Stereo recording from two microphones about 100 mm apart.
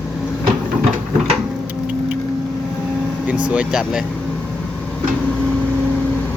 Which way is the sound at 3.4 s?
10° right (ahead or behind).